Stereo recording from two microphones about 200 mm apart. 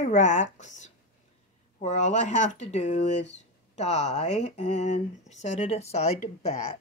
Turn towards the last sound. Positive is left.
turn(degrees=30)  # may be behind; listen again after turning